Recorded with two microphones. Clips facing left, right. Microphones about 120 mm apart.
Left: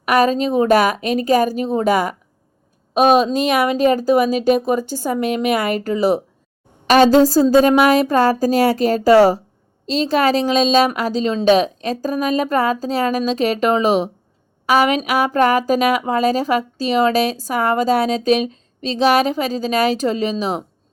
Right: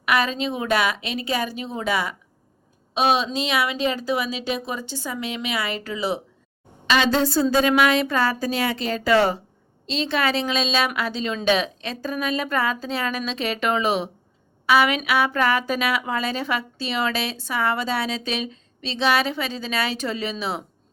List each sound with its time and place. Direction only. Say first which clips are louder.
0.0 s a woman's voice: left 7 dB; 40° left (ahead or behind)